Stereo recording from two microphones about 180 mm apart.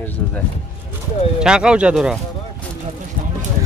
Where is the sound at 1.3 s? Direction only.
5° right (ahead or behind).